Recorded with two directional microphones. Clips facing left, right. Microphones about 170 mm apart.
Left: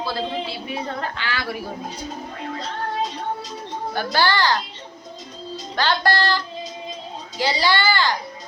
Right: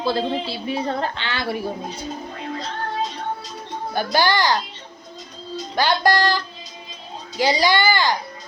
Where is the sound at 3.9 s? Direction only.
15° right (ahead or behind).